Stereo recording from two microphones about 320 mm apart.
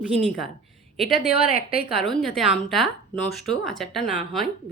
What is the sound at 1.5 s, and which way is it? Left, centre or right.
Speech, left.